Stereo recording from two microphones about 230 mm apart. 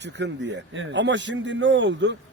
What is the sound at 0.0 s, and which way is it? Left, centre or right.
A man's voice, right.